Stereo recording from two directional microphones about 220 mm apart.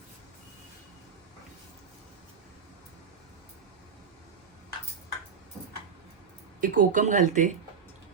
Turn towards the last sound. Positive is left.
turn(degrees=-35)  # may be behind; listen again after turning